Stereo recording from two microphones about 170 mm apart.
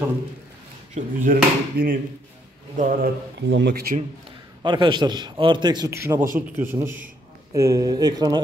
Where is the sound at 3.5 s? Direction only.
80° right.